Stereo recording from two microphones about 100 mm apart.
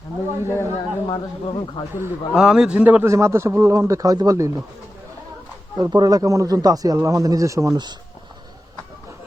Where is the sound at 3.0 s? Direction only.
30° right (ahead or behind).